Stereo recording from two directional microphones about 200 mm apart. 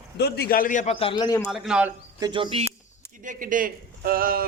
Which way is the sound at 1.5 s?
Centre (ahead or behind).